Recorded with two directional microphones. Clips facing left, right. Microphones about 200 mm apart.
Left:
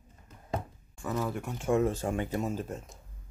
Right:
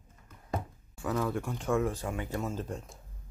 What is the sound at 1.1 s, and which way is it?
Speech, 10° left (ahead or behind).